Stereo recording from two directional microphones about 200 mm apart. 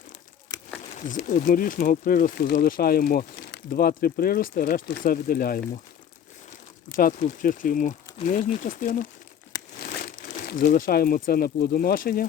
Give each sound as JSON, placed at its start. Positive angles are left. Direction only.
{"t": 0.9, "sound": "speech", "side_deg": 40}
{"t": 6.9, "sound": "speech", "side_deg": 40}